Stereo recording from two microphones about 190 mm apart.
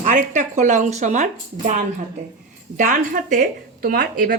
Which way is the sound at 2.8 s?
45° right (ahead or behind).